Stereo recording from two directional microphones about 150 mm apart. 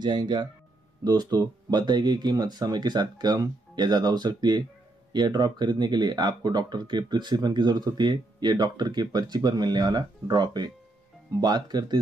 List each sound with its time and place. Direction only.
0.0 s speech: 30° right (ahead or behind)